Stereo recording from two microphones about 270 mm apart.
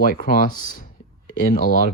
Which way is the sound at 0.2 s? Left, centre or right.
Left.